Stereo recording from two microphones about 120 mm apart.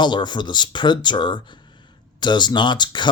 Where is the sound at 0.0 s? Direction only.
40° left (ahead or behind).